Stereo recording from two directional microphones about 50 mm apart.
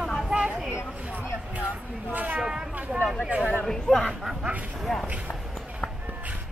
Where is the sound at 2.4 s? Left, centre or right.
Centre.